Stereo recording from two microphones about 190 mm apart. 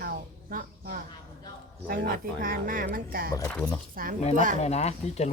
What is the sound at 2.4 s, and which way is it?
Speech, 45° right (ahead or behind).